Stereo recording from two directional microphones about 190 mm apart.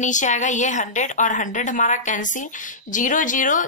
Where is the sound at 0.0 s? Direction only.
40° left (ahead or behind).